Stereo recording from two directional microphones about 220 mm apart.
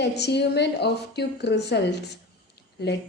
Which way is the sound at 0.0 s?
50° left (ahead or behind).